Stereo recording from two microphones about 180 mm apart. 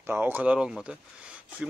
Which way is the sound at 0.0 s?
10° right (ahead or behind).